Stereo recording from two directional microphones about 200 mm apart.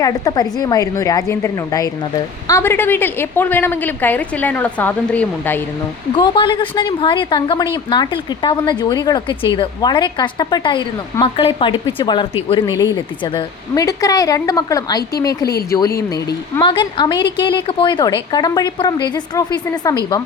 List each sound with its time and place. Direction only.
0.0 s a woman's voice: 20° left (ahead or behind)
6.1 s a woman's voice: 25° left (ahead or behind)